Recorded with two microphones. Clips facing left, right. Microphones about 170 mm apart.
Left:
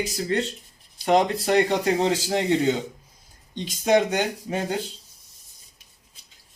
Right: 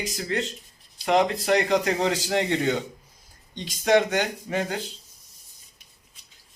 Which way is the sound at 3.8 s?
15° left (ahead or behind).